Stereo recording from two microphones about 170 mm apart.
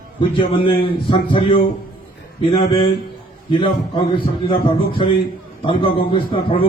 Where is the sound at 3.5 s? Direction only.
35° left (ahead or behind).